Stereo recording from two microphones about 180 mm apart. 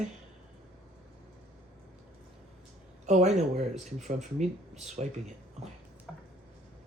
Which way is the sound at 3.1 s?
40° right (ahead or behind).